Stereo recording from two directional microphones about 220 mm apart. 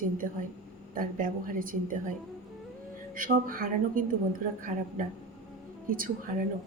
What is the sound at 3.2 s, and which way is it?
A woman's voice, 40° right (ahead or behind).